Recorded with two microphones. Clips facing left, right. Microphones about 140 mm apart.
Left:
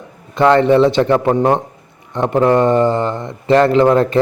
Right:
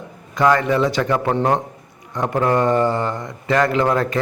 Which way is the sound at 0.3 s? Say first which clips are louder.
Left 6 dB; 25° left (ahead or behind).